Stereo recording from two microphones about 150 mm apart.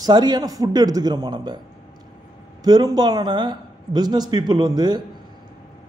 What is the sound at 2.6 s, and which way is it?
A man's voice, 25° right (ahead or behind).